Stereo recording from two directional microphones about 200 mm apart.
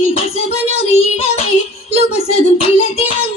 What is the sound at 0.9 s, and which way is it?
Music, 30° left (ahead or behind).